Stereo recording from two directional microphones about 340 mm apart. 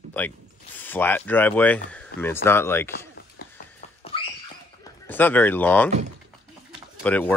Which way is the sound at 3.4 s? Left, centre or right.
Left.